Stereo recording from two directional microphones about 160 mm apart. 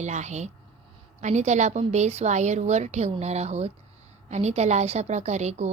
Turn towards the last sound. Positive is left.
turn(degrees=-45)  # may be behind; listen again after turning